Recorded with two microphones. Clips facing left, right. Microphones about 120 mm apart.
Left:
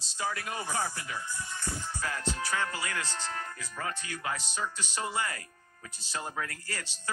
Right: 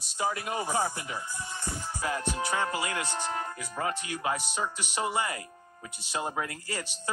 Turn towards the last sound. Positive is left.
turn(degrees=-20)  # may be behind; listen again after turning